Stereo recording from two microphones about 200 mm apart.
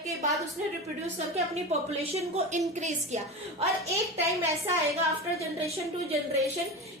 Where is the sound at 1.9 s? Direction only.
30° right (ahead or behind).